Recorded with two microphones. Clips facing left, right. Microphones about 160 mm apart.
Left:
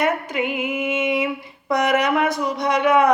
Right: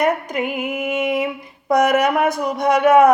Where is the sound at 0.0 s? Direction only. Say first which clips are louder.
Right 2 dB; 40° right (ahead or behind).